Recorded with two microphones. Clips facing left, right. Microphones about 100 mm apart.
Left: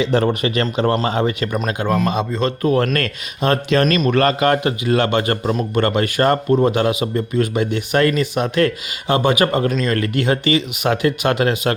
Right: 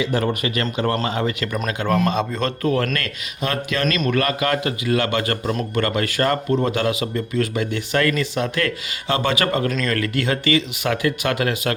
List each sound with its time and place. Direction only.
0.0 s speech: 25° left (ahead or behind)
2.8 s speech: 35° left (ahead or behind)